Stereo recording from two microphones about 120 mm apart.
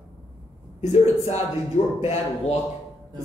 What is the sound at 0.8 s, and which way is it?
Speech, 70° left (ahead or behind).